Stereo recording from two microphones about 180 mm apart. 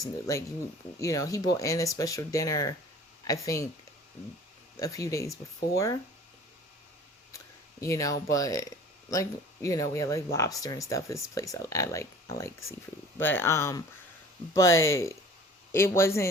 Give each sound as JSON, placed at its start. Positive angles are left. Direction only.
{"t": 0.9, "sound": "speech", "side_deg": 20}
{"t": 4.8, "sound": "speech", "side_deg": 20}
{"t": 7.3, "sound": "speech", "side_deg": 15}